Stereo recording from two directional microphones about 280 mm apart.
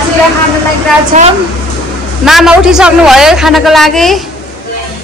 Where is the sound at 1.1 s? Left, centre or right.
Right.